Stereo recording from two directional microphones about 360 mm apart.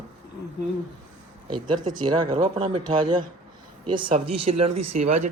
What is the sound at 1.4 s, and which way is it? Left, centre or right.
Speech, centre.